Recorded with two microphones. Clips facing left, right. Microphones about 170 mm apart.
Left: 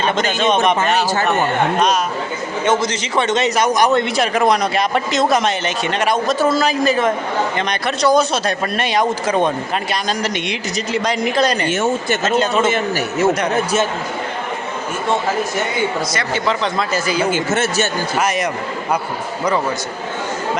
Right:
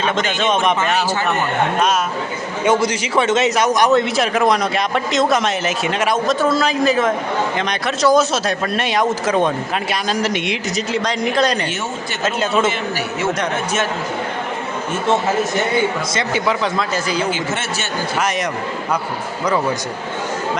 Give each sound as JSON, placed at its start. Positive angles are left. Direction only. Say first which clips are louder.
{"t": 0.2, "sound": "a man's voice", "louder": "left 3 dB", "side_deg": 0}
{"t": 2.6, "sound": "a man's voice", "louder": "right 2 dB", "side_deg": -10}
{"t": 11.7, "sound": "speech", "louder": "left 8 dB", "side_deg": 50}
{"t": 12.4, "sound": "a man's voice", "louder": "right 1 dB", "side_deg": 0}
{"t": 12.7, "sound": "a man's voice", "louder": "left 4 dB", "side_deg": 40}
{"t": 16.7, "sound": "a man's voice", "louder": "left 1 dB", "side_deg": 5}
{"t": 17.3, "sound": "speech", "louder": "left 5 dB", "side_deg": 45}